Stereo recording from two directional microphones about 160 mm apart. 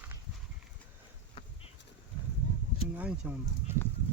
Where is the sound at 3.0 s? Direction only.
10° right (ahead or behind).